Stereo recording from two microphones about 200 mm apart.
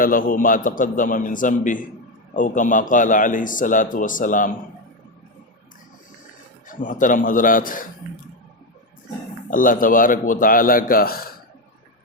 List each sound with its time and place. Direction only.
0.0 s a man's voice: 45° left (ahead or behind)
6.7 s a man's voice: 40° left (ahead or behind)
9.5 s a man's voice: 45° left (ahead or behind)